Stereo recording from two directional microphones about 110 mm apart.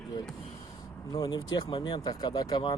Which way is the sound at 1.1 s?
40° left (ahead or behind).